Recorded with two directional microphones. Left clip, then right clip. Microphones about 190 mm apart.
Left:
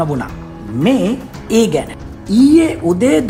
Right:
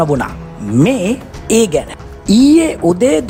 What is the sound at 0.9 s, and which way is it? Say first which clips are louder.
Speech: even; 45° right (ahead or behind).